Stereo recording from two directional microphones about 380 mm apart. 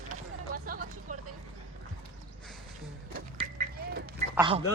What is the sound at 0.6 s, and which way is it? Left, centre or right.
Vehicle, right.